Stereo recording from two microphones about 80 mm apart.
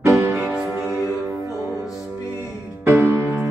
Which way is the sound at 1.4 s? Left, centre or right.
Left.